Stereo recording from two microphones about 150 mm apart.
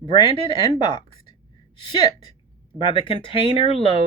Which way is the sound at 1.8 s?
30° left (ahead or behind).